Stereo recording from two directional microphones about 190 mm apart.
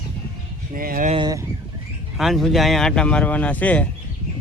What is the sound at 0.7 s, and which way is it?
Speech, 50° right (ahead or behind).